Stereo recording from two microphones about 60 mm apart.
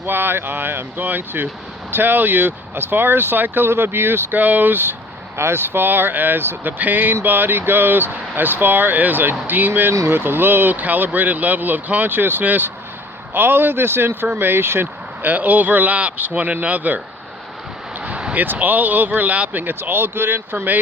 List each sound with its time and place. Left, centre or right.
0.0 s speech: right
18.0 s a sound: centre
18.3 s speech: right